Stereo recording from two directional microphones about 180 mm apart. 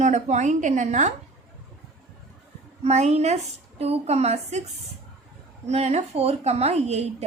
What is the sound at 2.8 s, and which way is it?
A woman's voice, 40° right (ahead or behind).